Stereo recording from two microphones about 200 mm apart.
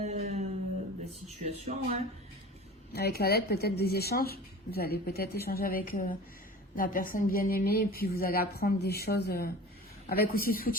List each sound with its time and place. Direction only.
0.0 s guitar: 35° right (ahead or behind)
1.4 s a sound: 35° right (ahead or behind)
2.9 s speech: 50° left (ahead or behind)